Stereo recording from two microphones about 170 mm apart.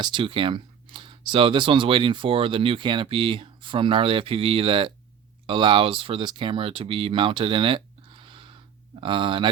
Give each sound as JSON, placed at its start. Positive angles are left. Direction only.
{"t": 0.0, "sound": "speech", "side_deg": -30}